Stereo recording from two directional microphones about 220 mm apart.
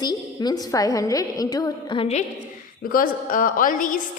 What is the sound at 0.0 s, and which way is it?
A woman's voice, 20° left (ahead or behind).